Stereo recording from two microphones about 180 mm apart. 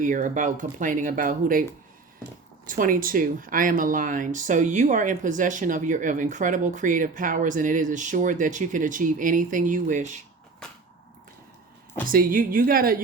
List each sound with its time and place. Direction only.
0.0 s speech: 45° right (ahead or behind)
2.6 s speech: 50° right (ahead or behind)
12.1 s speech: 50° right (ahead or behind)